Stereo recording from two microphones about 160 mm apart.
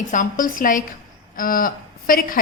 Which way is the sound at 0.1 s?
55° left (ahead or behind).